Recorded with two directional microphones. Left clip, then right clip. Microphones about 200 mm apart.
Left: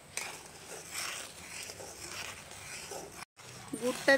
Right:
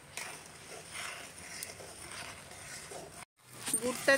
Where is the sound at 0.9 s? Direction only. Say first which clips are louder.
Left 3 dB; 5° left (ahead or behind).